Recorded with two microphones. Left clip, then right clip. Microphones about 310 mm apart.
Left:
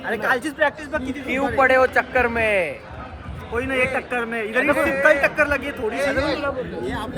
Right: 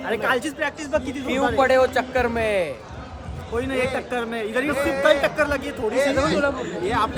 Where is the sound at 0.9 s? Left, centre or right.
Right.